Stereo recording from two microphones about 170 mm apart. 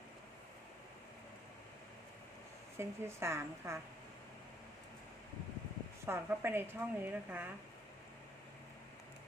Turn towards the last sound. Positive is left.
turn(degrees=-10)  # may be behind; listen again after turning